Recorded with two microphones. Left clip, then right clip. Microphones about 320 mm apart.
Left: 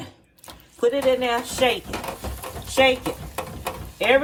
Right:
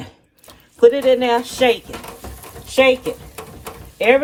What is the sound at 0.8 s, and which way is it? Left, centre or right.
Speech, right.